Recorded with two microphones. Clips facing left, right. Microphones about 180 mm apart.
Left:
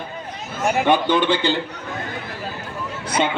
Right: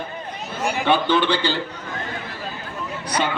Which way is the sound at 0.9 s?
15° left (ahead or behind).